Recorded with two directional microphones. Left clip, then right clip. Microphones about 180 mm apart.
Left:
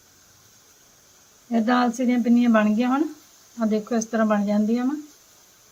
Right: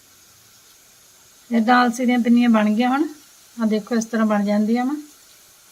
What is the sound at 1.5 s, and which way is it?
Speech, 15° right (ahead or behind).